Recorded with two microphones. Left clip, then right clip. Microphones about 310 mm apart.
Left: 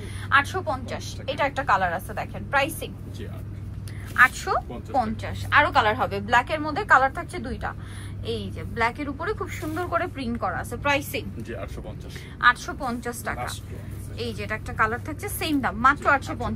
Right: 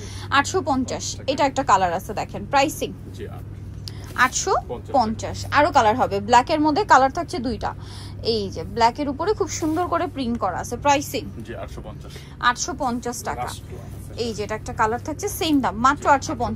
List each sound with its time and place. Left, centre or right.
0.3 s a woman's voice: right
4.2 s a woman's voice: centre
12.4 s a woman's voice: centre